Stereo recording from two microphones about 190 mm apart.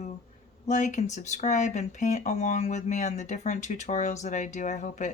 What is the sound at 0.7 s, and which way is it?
Speech, 40° left (ahead or behind).